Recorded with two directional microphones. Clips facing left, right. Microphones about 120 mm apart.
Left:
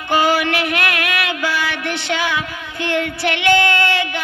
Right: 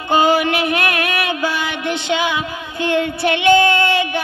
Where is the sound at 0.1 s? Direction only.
25° right (ahead or behind).